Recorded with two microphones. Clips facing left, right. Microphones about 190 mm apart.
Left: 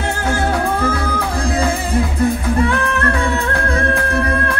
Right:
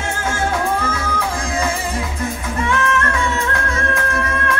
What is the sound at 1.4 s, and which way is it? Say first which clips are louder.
Music: left 7 dB; 35° left (ahead or behind).